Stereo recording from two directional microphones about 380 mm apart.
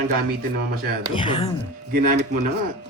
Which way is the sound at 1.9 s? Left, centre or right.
Right.